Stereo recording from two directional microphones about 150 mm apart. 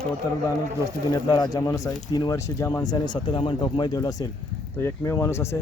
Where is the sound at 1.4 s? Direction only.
25° left (ahead or behind).